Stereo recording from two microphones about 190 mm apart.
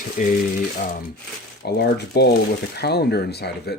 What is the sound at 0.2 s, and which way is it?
Mechanisms, 45° left (ahead or behind).